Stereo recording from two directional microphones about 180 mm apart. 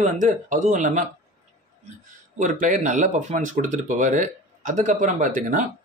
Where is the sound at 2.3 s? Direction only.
45° right (ahead or behind).